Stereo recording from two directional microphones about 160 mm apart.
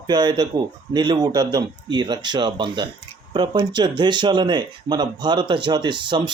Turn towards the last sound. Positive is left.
turn(degrees=-30)  # may be behind; listen again after turning